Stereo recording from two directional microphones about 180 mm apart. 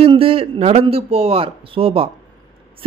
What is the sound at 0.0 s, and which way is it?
Speech, 30° right (ahead or behind).